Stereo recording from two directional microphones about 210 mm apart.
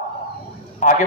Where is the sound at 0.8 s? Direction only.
35° left (ahead or behind).